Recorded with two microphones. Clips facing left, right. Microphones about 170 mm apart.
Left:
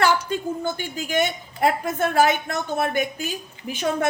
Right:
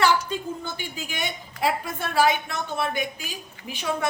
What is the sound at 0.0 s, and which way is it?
A woman's voice, 50° left (ahead or behind).